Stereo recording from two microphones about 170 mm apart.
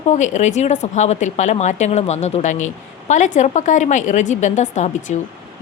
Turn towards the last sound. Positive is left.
turn(degrees=45)  # may be behind; listen again after turning